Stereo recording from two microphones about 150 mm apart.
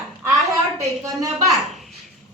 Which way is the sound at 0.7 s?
20° right (ahead or behind).